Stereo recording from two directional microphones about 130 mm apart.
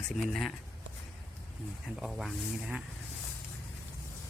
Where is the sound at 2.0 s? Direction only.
Centre (ahead or behind).